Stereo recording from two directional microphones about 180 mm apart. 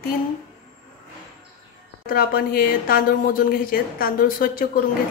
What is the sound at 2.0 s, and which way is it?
A woman's voice, 55° left (ahead or behind).